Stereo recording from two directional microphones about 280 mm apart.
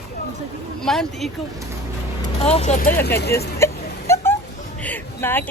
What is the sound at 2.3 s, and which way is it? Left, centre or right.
Speech, left.